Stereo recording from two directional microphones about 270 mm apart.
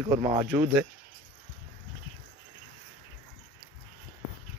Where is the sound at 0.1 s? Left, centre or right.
Centre.